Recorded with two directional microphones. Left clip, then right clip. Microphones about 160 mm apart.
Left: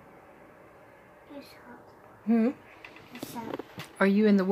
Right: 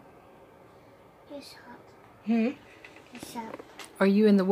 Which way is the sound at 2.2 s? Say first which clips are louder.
Left 2 dB; 25° left (ahead or behind).